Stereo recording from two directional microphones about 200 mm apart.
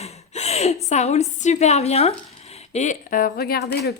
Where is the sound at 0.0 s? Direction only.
30° left (ahead or behind).